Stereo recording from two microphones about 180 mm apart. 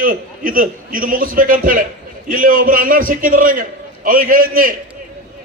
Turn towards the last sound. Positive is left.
turn(degrees=-50)  # may be behind; listen again after turning